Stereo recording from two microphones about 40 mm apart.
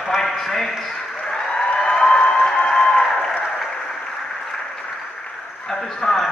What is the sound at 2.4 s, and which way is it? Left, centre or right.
Applause, centre.